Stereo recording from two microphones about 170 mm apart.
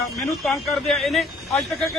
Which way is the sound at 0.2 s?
Centre (ahead or behind).